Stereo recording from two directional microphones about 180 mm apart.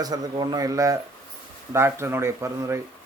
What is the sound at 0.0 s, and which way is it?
A man's voice, 20° right (ahead or behind).